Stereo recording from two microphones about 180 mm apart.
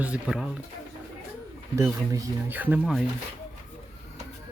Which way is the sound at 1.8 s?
15° right (ahead or behind).